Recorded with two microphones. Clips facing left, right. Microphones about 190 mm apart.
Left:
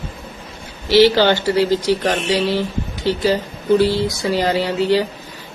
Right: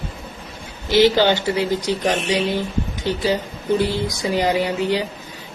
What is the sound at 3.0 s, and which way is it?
A man's voice, 15° right (ahead or behind).